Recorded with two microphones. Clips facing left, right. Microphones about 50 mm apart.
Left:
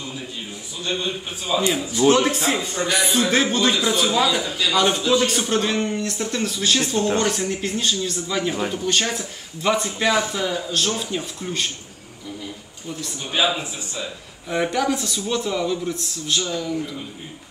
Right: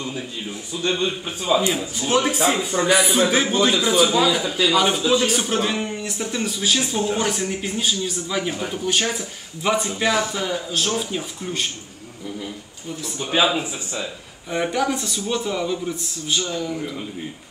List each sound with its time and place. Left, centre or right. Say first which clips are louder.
0.8 s a man's voice: right 3 dB; right
1.8 s a man's voice: left 4 dB; centre
14.5 s speech: left 1 dB; centre